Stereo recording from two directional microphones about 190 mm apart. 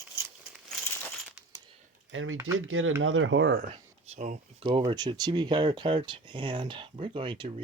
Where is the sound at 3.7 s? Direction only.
35° right (ahead or behind).